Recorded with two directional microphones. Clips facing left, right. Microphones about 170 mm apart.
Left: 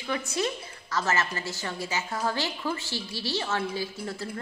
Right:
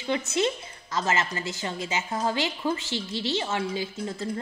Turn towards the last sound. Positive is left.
turn(degrees=-20)  # may be behind; listen again after turning